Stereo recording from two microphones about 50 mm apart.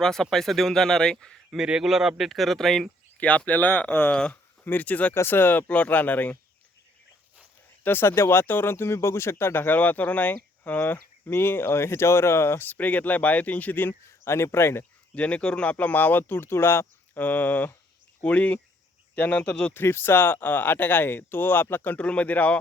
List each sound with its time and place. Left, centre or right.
0.0 s speech: centre
1.5 s speech: centre
3.2 s speech: left
4.1 s speech: left
7.9 s speech: left
11.3 s speech: left
14.3 s speech: left
15.1 s speech: left
17.2 s speech: left
19.4 s speech: left
19.7 s speech: left
21.9 s speech: left